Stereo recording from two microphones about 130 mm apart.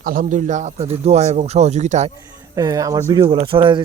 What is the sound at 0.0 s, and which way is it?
Speech, 90° right.